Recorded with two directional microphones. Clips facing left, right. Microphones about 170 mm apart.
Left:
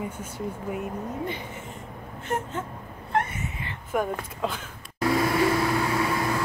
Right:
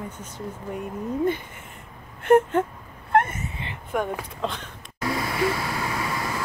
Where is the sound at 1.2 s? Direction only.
50° right (ahead or behind).